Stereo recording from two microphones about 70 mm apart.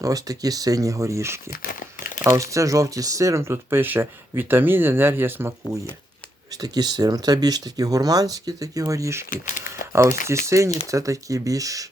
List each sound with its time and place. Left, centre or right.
0.0 s speech: right
6.5 s speech: right